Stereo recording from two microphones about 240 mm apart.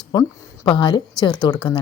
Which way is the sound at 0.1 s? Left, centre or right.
Centre.